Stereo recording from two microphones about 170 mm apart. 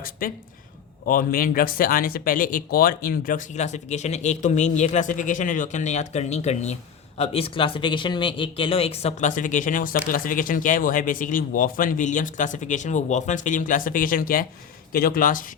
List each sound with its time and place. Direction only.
0.2 s speech: 55° left (ahead or behind)